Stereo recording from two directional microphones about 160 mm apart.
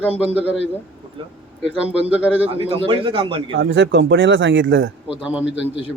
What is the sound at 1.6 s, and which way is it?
Speech, 5° right (ahead or behind).